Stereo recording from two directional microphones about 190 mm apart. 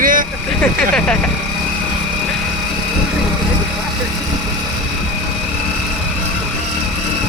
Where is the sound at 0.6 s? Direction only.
5° left (ahead or behind).